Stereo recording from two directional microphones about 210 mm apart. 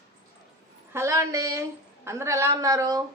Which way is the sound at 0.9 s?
15° right (ahead or behind).